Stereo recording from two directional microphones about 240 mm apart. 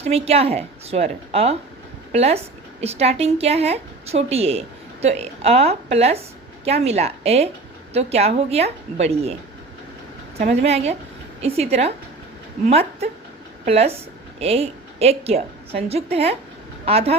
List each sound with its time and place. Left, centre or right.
0.0 s a woman's voice: right
10.5 s a woman's voice: right